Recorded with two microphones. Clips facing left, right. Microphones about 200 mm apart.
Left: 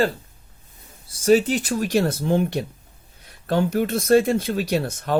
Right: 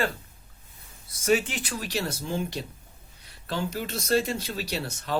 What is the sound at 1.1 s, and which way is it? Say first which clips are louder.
Speech: left 8 dB; 35° left (ahead or behind).